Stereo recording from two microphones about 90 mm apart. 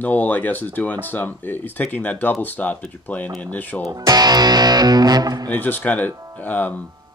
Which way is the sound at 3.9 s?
45° right (ahead or behind).